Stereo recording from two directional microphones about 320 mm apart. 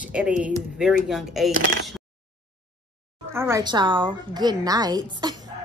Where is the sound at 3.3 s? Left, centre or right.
Centre.